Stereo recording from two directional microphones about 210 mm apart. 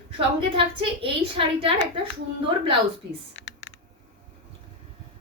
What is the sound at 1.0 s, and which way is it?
Speech, 25° right (ahead or behind).